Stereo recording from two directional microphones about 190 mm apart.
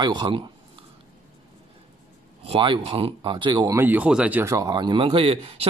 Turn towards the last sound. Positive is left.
turn(degrees=-30)  # may be behind; listen again after turning